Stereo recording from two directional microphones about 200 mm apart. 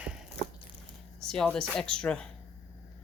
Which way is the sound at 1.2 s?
5° left (ahead or behind).